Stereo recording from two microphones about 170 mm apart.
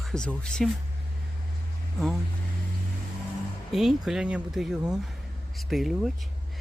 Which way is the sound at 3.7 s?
Centre (ahead or behind).